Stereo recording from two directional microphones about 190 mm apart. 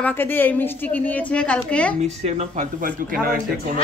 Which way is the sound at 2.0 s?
35° right (ahead or behind).